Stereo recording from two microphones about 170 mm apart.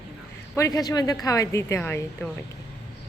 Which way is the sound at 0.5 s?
20° left (ahead or behind).